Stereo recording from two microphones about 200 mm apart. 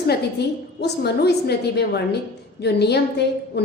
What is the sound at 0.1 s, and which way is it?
A woman's voice, 55° left (ahead or behind).